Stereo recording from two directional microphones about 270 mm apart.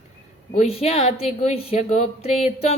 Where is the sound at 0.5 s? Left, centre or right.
Left.